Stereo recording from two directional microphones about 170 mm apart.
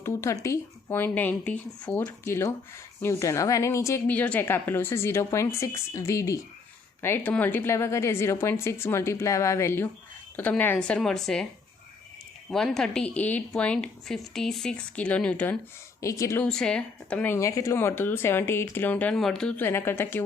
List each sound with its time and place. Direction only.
0.0 s a woman's voice: 15° left (ahead or behind)
12.5 s a woman's voice: centre (ahead or behind)
16.0 s a woman's voice: 20° left (ahead or behind)
16.5 s a woman's voice: 5° left (ahead or behind)